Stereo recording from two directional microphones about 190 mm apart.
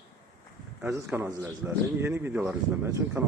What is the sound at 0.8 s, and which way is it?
A man's voice, 15° right (ahead or behind).